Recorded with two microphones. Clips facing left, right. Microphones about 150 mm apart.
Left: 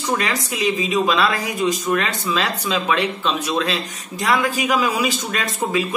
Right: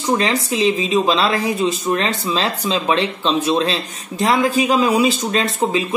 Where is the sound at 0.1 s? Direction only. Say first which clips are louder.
Right 5 dB; 30° right (ahead or behind).